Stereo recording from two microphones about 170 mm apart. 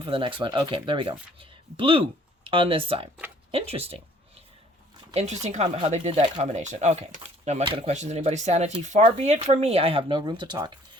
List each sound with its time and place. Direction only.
0.0 s speech: 30° right (ahead or behind)
5.1 s speech: 40° right (ahead or behind)